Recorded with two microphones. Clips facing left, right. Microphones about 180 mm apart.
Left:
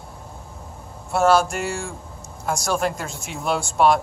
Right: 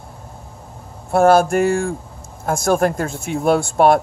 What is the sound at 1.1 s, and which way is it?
Speech, 55° right (ahead or behind).